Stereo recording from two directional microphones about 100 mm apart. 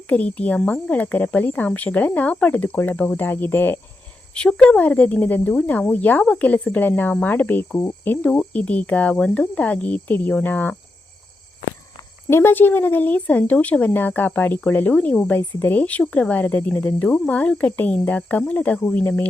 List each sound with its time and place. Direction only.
0.1 s a woman's voice: 15° left (ahead or behind)
4.4 s a woman's voice: 10° left (ahead or behind)
12.3 s a woman's voice: 25° left (ahead or behind)